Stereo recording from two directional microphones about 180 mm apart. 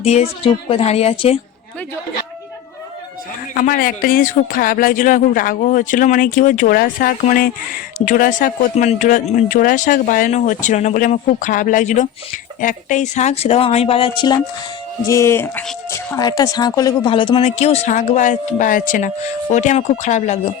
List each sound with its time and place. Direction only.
0.0 s speech: 35° left (ahead or behind)
3.5 s speech: 50° left (ahead or behind); by 14.3 s 25° left (ahead or behind)
15.0 s speech: 15° left (ahead or behind); by 20.5 s 40° left (ahead or behind)